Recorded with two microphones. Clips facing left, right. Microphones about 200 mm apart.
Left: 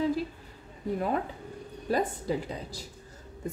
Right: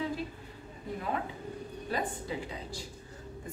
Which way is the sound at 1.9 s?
40° left (ahead or behind).